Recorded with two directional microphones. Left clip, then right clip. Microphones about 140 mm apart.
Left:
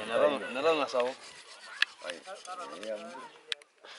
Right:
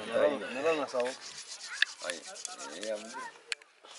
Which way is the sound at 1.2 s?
Centre (ahead or behind).